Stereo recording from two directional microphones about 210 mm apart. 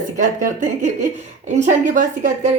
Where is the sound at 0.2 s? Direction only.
35° right (ahead or behind).